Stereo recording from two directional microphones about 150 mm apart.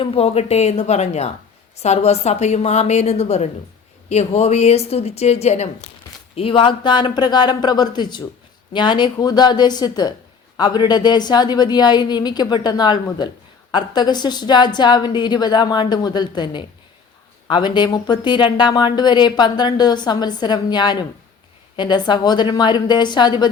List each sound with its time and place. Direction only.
0.0 s a woman's voice: 40° left (ahead or behind)